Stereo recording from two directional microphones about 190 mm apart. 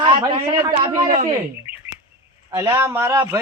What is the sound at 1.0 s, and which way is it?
Speech, 45° right (ahead or behind).